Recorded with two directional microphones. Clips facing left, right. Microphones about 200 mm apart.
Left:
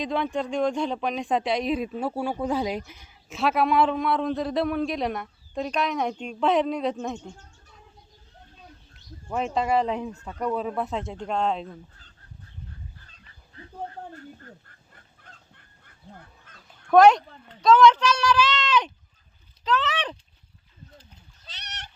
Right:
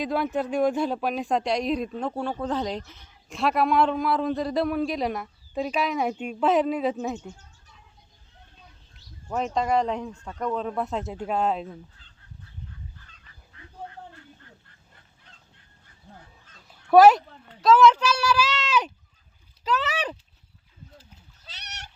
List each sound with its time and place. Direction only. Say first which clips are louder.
0.0 s speech: right 1 dB; 5° right (ahead or behind)
9.3 s speech: even; 5° left (ahead or behind)
13.1 s fowl: even; 35° left (ahead or behind)
15.2 s goose: left 4 dB; 50° left (ahead or behind)
16.6 s a child's voice: right 1 dB; 5° right (ahead or behind)
21.0 s splash: even; 5° right (ahead or behind)